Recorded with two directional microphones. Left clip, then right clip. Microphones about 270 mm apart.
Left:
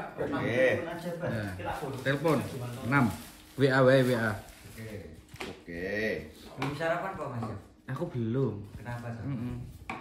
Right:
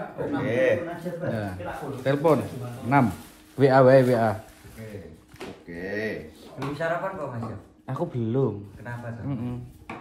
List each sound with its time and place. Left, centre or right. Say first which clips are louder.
0.2 s a man's voice: right 3 dB; centre
5.7 s speech: right 2 dB; centre
6.6 s a man's voice: right 4 dB; centre